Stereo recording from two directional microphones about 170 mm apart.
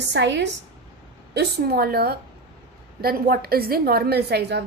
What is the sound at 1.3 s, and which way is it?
A woman's voice, 70° right (ahead or behind).